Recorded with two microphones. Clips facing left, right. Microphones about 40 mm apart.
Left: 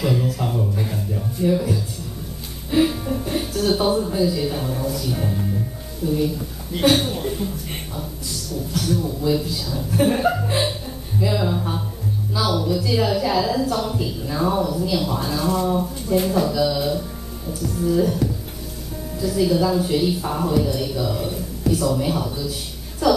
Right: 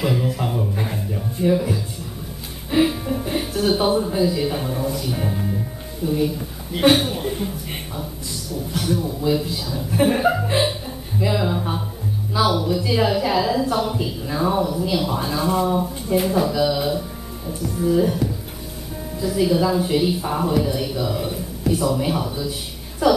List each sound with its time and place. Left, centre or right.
0.0 s a woman's voice: centre
1.1 s music: centre
2.7 s a woman's voice: centre